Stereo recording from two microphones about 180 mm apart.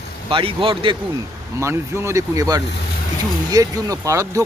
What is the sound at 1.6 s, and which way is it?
Speech, 15° right (ahead or behind).